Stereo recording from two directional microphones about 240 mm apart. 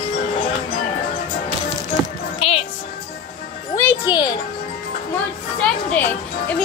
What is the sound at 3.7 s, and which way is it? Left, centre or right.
Speech, centre.